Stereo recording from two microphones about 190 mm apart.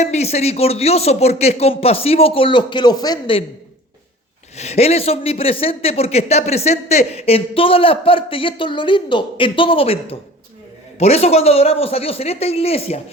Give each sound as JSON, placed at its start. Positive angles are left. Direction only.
{"t": 0.0, "sound": "a man's voice", "side_deg": 35}
{"t": 4.5, "sound": "a man's voice", "side_deg": 35}